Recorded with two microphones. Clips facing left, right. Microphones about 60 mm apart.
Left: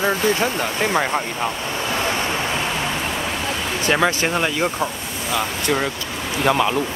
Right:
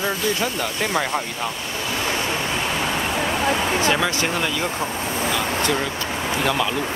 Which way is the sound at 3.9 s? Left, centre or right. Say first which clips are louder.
Left 2 dB; left.